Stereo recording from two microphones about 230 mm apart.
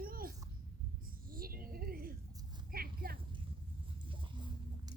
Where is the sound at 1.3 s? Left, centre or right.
Right.